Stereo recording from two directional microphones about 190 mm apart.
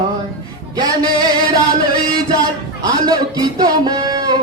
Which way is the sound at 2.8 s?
20° right (ahead or behind).